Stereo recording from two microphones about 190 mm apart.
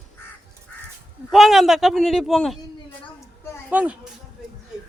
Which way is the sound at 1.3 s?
Centre (ahead or behind).